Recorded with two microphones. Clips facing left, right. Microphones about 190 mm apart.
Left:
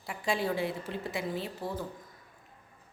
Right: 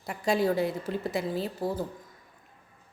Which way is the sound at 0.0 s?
40° right (ahead or behind).